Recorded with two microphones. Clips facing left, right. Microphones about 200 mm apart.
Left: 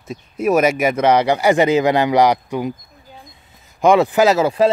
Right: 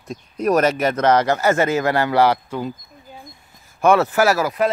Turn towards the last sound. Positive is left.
turn(degrees=30)  # may be behind; listen again after turning